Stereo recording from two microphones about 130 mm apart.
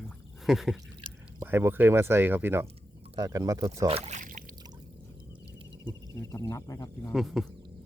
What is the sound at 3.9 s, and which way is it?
Speech, 45° right (ahead or behind).